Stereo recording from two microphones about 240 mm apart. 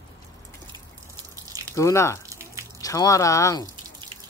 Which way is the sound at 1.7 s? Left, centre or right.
Centre.